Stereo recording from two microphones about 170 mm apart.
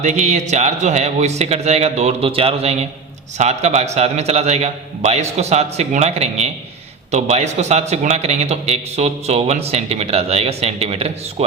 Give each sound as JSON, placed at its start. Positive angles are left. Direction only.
{"t": 0.0, "sound": "a man's voice", "side_deg": -40}